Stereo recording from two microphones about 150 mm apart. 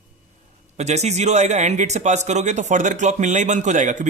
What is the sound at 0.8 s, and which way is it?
Speech, 50° right (ahead or behind).